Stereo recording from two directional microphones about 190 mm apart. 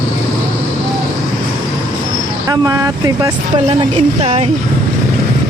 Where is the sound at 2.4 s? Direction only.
20° right (ahead or behind).